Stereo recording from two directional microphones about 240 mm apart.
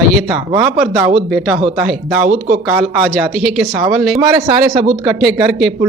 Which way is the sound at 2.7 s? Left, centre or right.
Centre.